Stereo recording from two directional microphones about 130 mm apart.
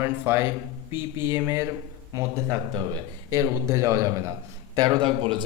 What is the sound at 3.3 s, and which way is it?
Speech, 25° right (ahead or behind).